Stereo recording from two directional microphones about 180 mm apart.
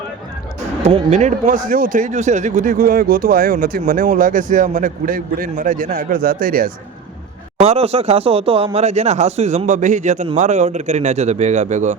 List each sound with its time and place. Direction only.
0.9 s speech: 35° right (ahead or behind); by 6.7 s 50° right (ahead or behind)
7.6 s speech: 35° right (ahead or behind)